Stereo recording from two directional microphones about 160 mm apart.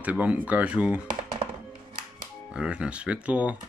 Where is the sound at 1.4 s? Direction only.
35° right (ahead or behind).